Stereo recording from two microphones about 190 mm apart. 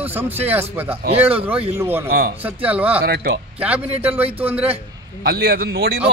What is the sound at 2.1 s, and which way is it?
Speech, 55° right (ahead or behind).